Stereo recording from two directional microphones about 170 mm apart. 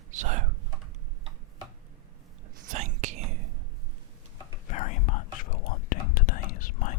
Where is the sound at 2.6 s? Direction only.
45° right (ahead or behind).